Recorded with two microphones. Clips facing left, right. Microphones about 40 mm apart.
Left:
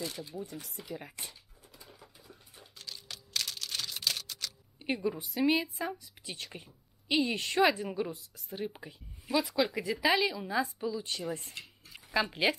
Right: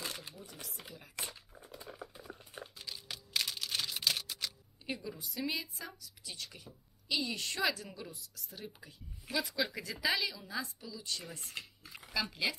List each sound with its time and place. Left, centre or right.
0.0 s sewing machine: right
0.3 s speech: left
0.6 s speech: right
1.2 s a sound: right
2.8 s typing: centre
4.8 s speech: left
9.5 s speech: centre; by 12.5 s left